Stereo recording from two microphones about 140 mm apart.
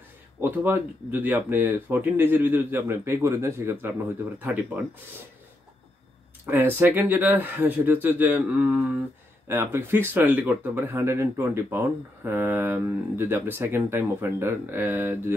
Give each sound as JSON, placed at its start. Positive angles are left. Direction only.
{"t": 0.4, "sound": "speech", "side_deg": -15}
{"t": 6.4, "sound": "speech", "side_deg": -15}